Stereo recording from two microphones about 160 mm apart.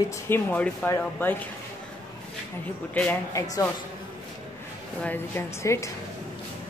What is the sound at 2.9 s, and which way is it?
Speech, 10° left (ahead or behind).